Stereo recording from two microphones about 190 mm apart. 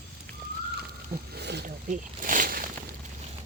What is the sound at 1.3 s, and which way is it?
Wild animals, 60° right (ahead or behind).